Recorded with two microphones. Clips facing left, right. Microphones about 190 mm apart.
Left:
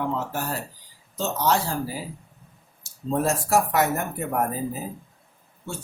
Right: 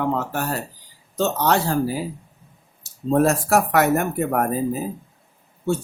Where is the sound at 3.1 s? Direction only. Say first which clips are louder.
Right 5 dB; 65° right (ahead or behind).